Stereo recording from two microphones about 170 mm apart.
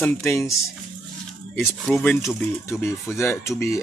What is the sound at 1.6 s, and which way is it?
Speech, centre (ahead or behind).